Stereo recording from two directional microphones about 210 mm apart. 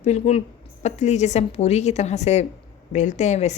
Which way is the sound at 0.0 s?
30° left (ahead or behind).